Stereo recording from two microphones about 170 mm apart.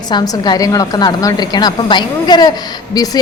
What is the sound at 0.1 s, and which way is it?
A woman's voice, 25° left (ahead or behind).